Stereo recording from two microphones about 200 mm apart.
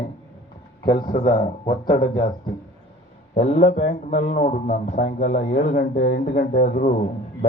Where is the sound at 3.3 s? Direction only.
35° left (ahead or behind).